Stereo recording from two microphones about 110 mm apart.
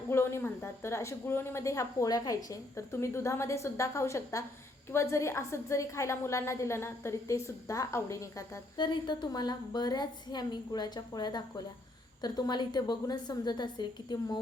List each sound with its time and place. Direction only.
0.1 s speech: 25° left (ahead or behind)
8.7 s a woman's voice: 45° left (ahead or behind)